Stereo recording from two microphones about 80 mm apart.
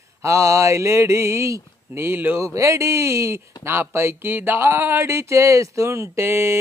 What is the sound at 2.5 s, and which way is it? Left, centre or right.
Speech, right.